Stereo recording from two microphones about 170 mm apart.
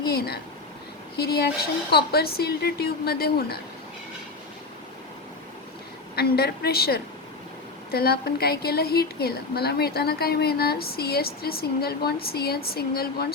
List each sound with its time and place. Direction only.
0.1 s a woman's voice: 65° left (ahead or behind)
6.1 s a woman's voice: 70° left (ahead or behind)